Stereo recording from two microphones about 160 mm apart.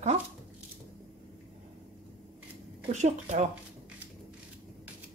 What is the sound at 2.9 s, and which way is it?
Speech, 45° right (ahead or behind).